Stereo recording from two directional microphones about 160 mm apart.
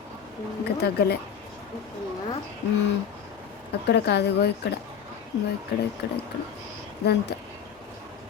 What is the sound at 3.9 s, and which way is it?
Speech, 90° left.